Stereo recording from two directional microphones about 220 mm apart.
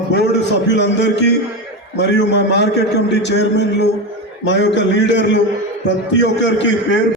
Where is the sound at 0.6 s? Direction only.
50° left (ahead or behind).